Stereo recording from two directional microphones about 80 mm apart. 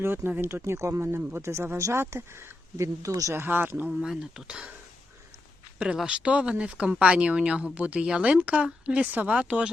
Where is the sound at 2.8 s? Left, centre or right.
Right.